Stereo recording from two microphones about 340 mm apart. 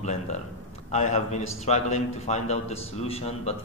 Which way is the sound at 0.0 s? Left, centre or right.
Centre.